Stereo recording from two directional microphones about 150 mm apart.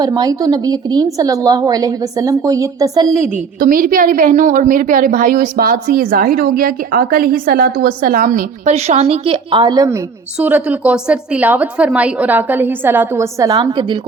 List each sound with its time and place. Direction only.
0.0 s a woman's voice: 25° right (ahead or behind)
3.6 s a woman's voice: 70° right (ahead or behind); by 10.0 s 25° right (ahead or behind)
10.4 s a woman's voice: 10° right (ahead or behind)
13.5 s a woman's voice: 35° right (ahead or behind)